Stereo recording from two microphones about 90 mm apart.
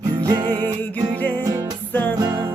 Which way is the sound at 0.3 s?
50° right (ahead or behind).